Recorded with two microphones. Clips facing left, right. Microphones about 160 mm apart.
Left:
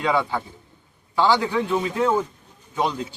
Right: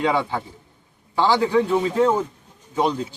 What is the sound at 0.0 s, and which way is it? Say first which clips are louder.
Speech: right 1 dB; 20° right (ahead or behind).